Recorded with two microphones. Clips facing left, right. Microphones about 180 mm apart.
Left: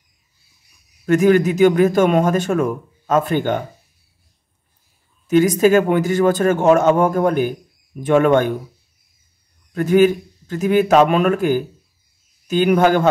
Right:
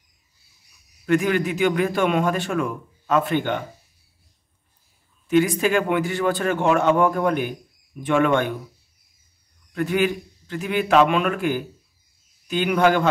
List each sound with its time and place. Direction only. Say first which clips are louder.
1.0 s a man's voice: left 7 dB; 45° left (ahead or behind)
5.3 s a man's voice: left 6 dB; 40° left (ahead or behind)
9.8 s a man's voice: left 8 dB; 45° left (ahead or behind)